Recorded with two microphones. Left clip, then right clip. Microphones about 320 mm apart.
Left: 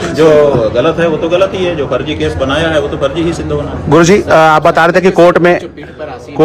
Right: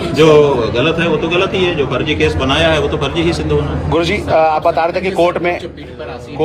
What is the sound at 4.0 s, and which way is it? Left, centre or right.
A man's voice, left.